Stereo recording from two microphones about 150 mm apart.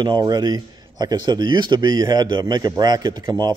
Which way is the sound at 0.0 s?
30° right (ahead or behind).